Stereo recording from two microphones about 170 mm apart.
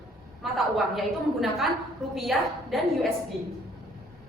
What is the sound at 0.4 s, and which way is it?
A woman's voice, centre (ahead or behind).